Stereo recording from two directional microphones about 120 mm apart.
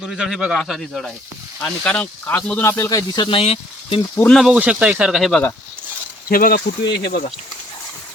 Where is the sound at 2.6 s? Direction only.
25° left (ahead or behind).